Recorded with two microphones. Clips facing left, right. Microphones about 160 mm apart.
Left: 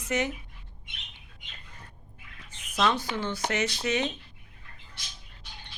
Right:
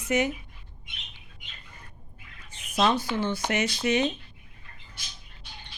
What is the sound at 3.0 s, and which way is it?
Speech, 10° right (ahead or behind).